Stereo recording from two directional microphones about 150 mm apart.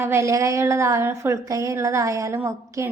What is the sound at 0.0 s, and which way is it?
A woman's voice, 20° right (ahead or behind).